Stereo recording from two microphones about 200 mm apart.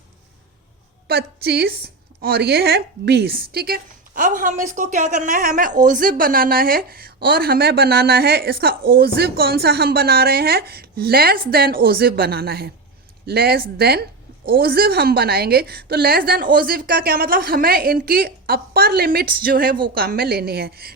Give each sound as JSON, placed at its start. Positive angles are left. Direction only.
{"t": 1.0, "sound": "a woman's voice", "side_deg": -55}